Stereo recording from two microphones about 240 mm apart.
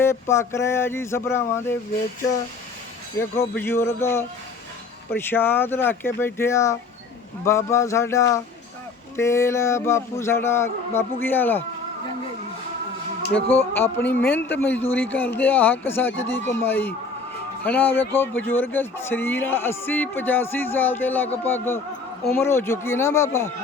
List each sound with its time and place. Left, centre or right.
0.0 s speech: centre
3.2 s speech: centre
13.3 s speech: centre